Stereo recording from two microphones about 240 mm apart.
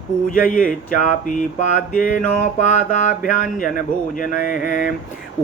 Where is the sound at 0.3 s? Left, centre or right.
Left.